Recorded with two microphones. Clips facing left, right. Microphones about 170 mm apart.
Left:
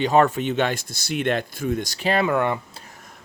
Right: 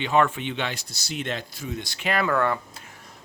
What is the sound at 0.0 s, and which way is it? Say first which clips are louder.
Speech: left 4 dB; 40° left (ahead or behind).